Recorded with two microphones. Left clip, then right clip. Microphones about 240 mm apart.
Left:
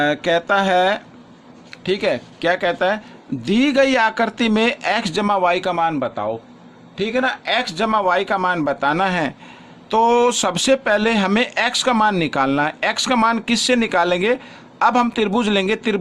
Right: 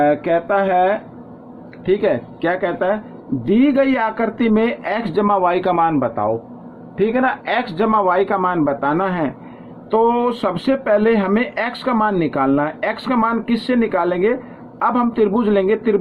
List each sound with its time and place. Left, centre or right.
0.0 s speech: left
1.8 s a man's voice: left